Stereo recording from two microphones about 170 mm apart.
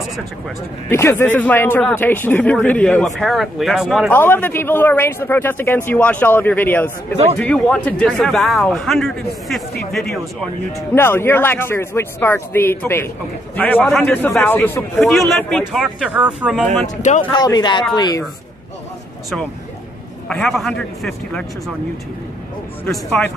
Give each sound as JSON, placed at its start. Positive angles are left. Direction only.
{"t": 0.8, "sound": "speech", "side_deg": 15}
{"t": 4.1, "sound": "speech", "side_deg": 10}
{"t": 11.0, "sound": "speech", "side_deg": 15}
{"t": 15.0, "sound": "speech", "side_deg": 0}
{"t": 17.2, "sound": "speech", "side_deg": 25}
{"t": 20.2, "sound": "speech", "side_deg": 5}
{"t": 22.8, "sound": "speech", "side_deg": 5}